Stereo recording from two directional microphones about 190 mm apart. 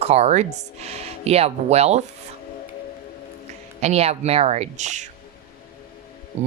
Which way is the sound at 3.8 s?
35° right (ahead or behind).